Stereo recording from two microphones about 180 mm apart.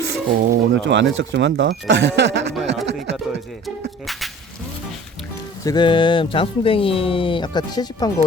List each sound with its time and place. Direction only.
0.1 s speech: 70° right (ahead or behind)
4.0 s speech: centre (ahead or behind)
5.6 s speech: 25° left (ahead or behind)